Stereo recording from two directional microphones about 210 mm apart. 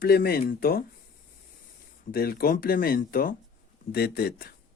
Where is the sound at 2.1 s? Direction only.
45° left (ahead or behind).